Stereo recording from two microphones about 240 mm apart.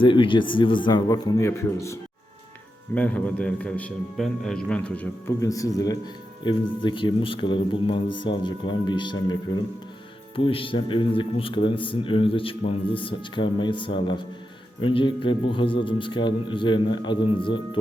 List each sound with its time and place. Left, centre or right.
0.0 s a man's voice: left
10.3 s a man's voice: left